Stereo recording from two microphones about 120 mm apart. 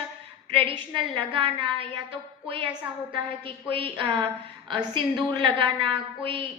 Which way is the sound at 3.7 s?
50° right (ahead or behind).